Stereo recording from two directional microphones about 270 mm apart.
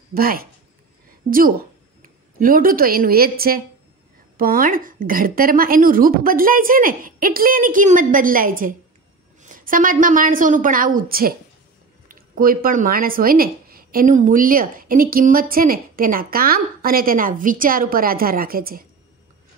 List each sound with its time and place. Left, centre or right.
0.1 s speech: right
2.0 s speech: right